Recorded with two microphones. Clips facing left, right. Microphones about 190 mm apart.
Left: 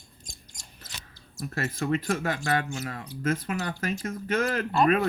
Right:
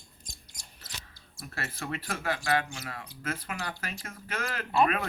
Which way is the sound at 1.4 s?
40° left (ahead or behind).